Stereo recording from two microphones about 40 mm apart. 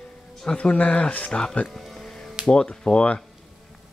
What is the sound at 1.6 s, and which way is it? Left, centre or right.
Music, centre.